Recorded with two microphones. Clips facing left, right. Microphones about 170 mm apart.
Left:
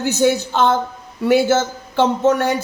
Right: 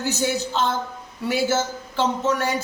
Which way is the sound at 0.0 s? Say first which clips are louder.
Left 7 dB; 60° left (ahead or behind).